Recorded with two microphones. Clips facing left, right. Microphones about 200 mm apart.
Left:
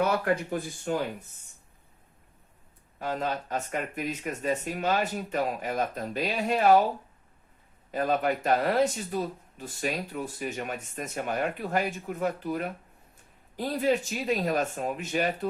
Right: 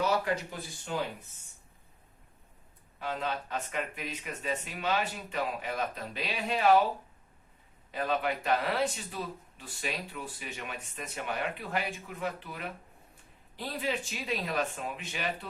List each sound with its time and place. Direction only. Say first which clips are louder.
0.0 s speech: left 4 dB; 55° left (ahead or behind)
3.0 s speech: left 4 dB; 45° left (ahead or behind)
7.9 s speech: left 5 dB; 45° left (ahead or behind)